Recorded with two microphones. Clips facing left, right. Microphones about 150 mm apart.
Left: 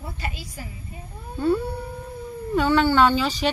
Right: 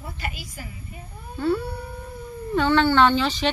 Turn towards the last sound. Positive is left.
turn(degrees=5)  # may be behind; listen again after turning